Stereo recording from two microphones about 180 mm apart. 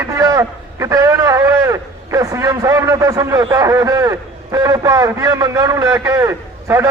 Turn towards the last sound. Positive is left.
turn(degrees=-15)  # may be behind; listen again after turning